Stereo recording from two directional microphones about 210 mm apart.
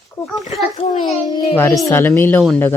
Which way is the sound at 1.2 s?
20° left (ahead or behind).